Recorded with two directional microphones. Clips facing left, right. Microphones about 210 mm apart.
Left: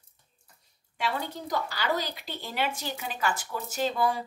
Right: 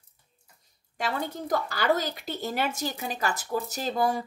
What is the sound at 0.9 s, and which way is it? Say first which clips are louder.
Speech: right 1 dB; 45° right (ahead or behind).